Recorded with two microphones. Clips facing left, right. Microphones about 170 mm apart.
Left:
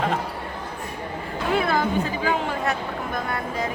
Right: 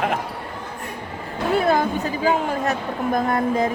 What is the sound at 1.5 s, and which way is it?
Speech, 40° right (ahead or behind).